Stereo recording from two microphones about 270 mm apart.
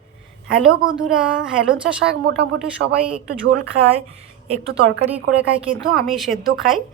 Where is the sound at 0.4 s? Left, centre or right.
Centre.